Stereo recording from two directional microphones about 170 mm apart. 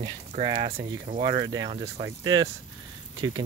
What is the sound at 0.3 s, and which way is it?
Speech, 35° right (ahead or behind).